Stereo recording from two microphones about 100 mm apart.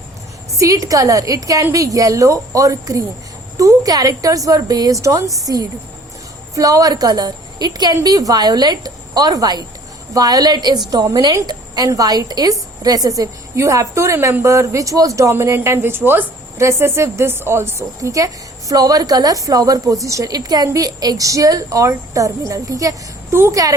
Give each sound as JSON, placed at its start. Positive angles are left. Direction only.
{"t": 0.5, "sound": "a woman's voice", "side_deg": -35}
{"t": 6.5, "sound": "a woman's voice", "side_deg": -35}